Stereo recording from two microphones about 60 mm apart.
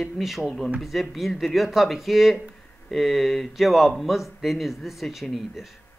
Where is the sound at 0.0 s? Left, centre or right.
Centre.